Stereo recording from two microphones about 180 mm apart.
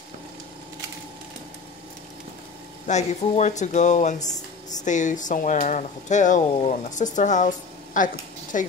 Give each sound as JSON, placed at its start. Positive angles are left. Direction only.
{"t": 2.9, "sound": "speech", "side_deg": 40}
{"t": 4.2, "sound": "a sound", "side_deg": 20}
{"t": 4.8, "sound": "speech", "side_deg": 45}